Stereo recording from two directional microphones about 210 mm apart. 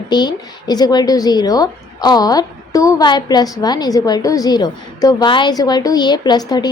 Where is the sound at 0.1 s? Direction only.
20° left (ahead or behind).